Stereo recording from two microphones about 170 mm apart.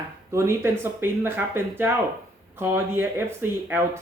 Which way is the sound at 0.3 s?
15° right (ahead or behind).